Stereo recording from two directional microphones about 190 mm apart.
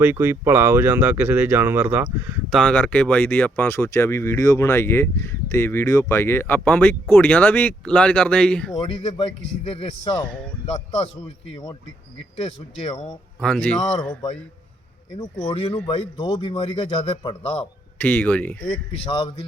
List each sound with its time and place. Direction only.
0.0 s speech: 10° right (ahead or behind)
8.8 s speech: 25° left (ahead or behind)
13.4 s a man's voice: 5° left (ahead or behind)
15.2 s speech: 30° left (ahead or behind)
18.0 s speech: 10° left (ahead or behind)